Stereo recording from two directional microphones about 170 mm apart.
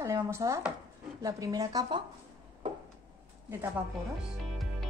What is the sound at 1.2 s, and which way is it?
Speech, 20° right (ahead or behind).